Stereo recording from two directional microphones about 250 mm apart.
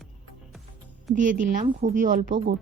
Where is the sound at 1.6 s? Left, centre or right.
Right.